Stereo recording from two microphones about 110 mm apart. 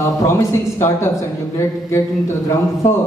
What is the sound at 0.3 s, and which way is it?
A man's voice, 25° left (ahead or behind).